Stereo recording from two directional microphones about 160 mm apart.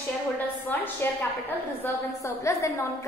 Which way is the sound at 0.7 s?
10° left (ahead or behind).